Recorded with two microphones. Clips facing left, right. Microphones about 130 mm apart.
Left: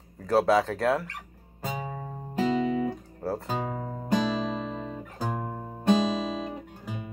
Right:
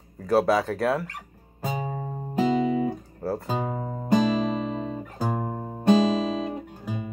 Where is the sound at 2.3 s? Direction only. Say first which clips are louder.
Right 3 dB; 10° right (ahead or behind).